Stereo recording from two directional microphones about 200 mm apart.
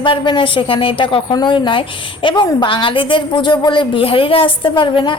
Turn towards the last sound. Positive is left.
turn(degrees=25)  # may be behind; listen again after turning